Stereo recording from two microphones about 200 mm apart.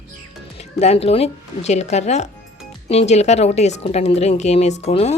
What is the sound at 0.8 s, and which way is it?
Speech, 30° left (ahead or behind).